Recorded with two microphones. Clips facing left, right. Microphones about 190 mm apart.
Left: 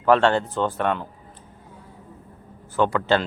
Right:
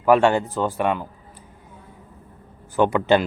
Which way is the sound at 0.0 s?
10° right (ahead or behind).